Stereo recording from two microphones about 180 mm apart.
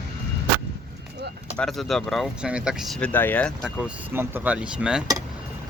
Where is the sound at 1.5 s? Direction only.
5° left (ahead or behind).